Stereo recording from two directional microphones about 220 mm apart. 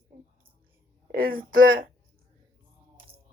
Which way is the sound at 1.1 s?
40° right (ahead or behind).